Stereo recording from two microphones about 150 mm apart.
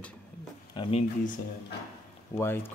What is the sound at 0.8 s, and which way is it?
Speech, 40° left (ahead or behind).